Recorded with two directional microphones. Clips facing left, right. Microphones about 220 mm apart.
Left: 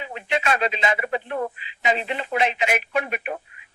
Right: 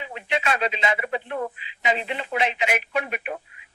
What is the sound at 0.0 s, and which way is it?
Speech, 45° left (ahead or behind).